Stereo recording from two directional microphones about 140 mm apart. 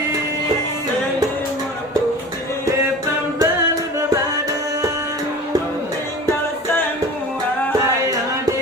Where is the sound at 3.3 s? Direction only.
20° right (ahead or behind).